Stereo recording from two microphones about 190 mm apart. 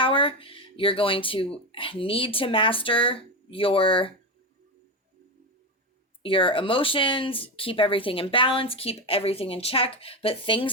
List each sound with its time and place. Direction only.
0.0 s speech: 25° left (ahead or behind)
6.2 s speech: 30° left (ahead or behind)